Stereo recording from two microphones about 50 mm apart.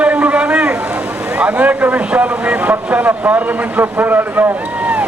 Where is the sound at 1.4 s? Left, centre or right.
Right.